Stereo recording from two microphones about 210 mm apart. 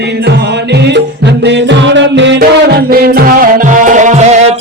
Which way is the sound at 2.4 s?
45° right (ahead or behind).